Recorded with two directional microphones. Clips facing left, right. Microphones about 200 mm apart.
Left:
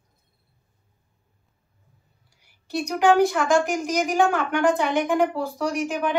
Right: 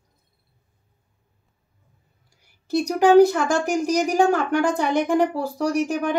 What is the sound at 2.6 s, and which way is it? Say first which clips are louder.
A woman's voice: right 2 dB; 40° right (ahead or behind).